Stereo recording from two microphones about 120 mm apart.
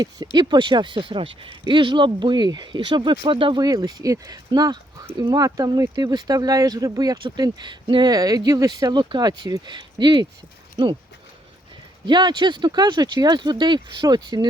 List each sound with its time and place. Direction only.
0.3 s speech: 40° right (ahead or behind)
3.6 s speech: 35° right (ahead or behind)
12.0 s speech: 40° right (ahead or behind)